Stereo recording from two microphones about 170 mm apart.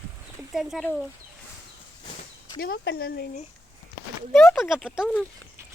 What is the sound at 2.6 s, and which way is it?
Speech, 65° left (ahead or behind).